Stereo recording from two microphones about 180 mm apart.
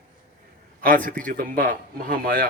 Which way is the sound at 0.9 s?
50° right (ahead or behind).